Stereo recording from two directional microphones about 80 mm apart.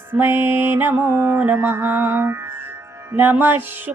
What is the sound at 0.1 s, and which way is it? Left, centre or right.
Music, right.